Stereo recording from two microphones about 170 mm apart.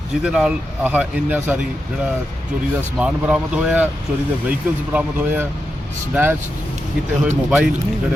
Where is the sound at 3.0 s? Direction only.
5° right (ahead or behind).